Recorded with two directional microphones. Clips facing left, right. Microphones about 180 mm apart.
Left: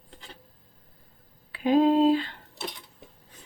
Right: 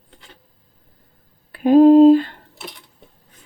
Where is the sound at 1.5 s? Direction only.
50° right (ahead or behind).